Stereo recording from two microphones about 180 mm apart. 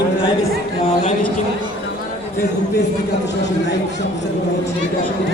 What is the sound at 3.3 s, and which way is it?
Speech, 70° left (ahead or behind).